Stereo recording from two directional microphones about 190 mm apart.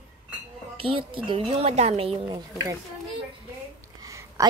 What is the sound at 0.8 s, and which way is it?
A woman's voice, 30° right (ahead or behind).